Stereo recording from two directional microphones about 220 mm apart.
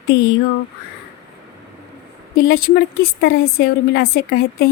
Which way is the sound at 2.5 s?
40° left (ahead or behind).